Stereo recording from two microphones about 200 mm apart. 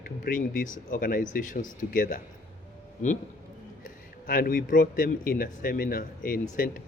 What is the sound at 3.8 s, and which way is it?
Speech, 45° left (ahead or behind).